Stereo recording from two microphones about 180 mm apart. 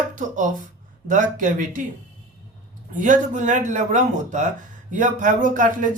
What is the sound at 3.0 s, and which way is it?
Speech, 45° right (ahead or behind).